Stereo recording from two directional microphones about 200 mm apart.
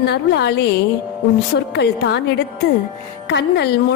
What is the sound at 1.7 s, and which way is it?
Speech, 55° left (ahead or behind).